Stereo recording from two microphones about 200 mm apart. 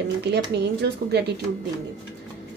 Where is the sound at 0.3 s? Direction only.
60° right (ahead or behind).